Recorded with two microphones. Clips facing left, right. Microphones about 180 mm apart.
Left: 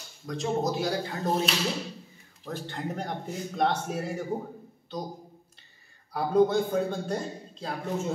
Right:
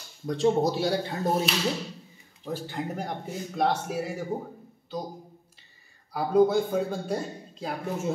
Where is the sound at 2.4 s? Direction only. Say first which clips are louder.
Right 2 dB; 5° right (ahead or behind).